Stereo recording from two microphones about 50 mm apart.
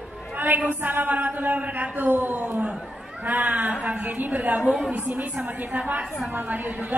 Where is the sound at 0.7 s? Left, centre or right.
Right.